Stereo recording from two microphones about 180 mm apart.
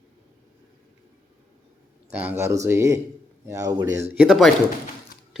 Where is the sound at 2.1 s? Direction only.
10° right (ahead or behind).